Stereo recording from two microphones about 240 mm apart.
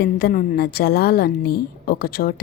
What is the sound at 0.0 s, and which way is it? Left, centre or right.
A woman's voice, left.